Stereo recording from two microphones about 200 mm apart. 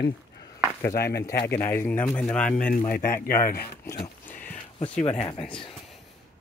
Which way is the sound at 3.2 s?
45° left (ahead or behind).